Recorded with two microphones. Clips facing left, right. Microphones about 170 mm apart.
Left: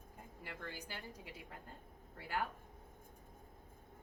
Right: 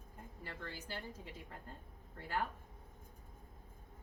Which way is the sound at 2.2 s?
10° left (ahead or behind).